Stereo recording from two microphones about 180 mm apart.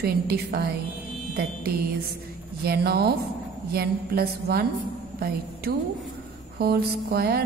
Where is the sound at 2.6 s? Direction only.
60° right (ahead or behind).